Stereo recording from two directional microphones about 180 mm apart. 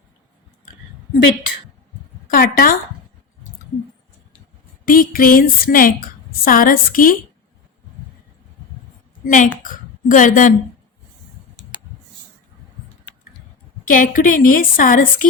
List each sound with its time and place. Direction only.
2.2 s speech: 50° left (ahead or behind)
4.9 s a woman's voice: 50° left (ahead or behind)
9.2 s a woman's voice: 45° left (ahead or behind)
13.8 s a woman's voice: 50° left (ahead or behind)